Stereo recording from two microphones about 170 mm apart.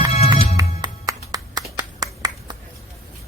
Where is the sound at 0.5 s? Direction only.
20° right (ahead or behind).